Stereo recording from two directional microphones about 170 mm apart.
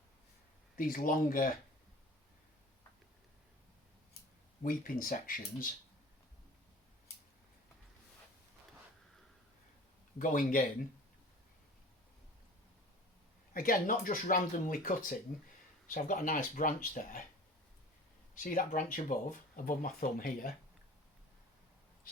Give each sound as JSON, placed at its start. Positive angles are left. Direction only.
{"t": 0.8, "sound": "speech", "side_deg": 55}
{"t": 4.6, "sound": "speech", "side_deg": 55}
{"t": 10.2, "sound": "speech", "side_deg": 55}
{"t": 13.5, "sound": "speech", "side_deg": 55}
{"t": 18.4, "sound": "speech", "side_deg": 50}